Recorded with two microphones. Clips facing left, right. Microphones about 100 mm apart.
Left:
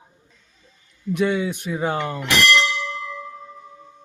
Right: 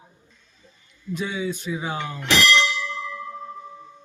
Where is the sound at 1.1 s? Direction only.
65° left (ahead or behind).